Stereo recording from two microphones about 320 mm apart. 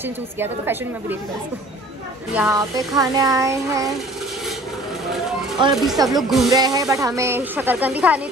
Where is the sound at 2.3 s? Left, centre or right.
Centre.